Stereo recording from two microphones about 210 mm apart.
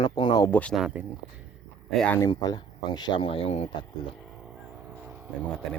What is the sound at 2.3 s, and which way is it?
Speech, 20° left (ahead or behind).